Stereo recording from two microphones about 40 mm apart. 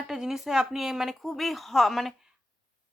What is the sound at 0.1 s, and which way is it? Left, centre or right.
A woman's voice, centre.